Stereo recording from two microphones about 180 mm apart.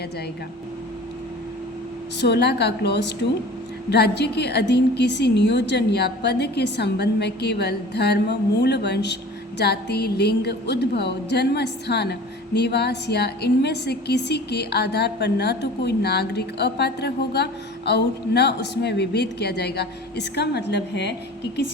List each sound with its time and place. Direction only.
2.2 s a woman's voice: 65° left (ahead or behind)